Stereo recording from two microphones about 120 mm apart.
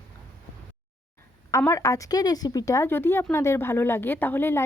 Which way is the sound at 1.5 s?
25° left (ahead or behind).